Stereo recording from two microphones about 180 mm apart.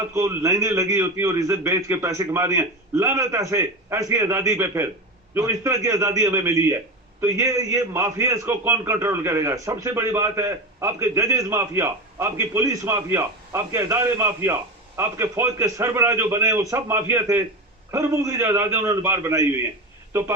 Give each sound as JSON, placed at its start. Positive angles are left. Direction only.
{"t": 0.1, "sound": "a man's voice", "side_deg": -15}